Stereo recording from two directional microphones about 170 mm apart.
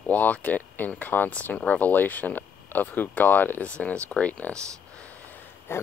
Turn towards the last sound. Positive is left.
turn(degrees=15)  # may be behind; listen again after turning